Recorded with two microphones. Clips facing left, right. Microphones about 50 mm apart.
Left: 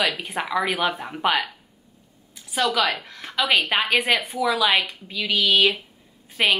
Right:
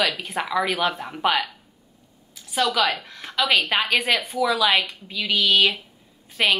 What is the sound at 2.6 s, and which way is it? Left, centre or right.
A woman's voice, centre.